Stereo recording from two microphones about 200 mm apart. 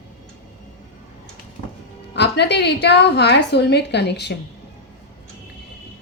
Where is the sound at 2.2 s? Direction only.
55° left (ahead or behind).